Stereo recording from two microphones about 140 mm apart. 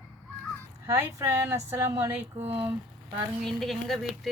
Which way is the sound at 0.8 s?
20° right (ahead or behind).